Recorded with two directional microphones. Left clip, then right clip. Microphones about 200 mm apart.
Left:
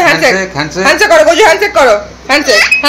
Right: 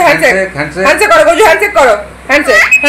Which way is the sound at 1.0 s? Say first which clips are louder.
Even; 5° left (ahead or behind).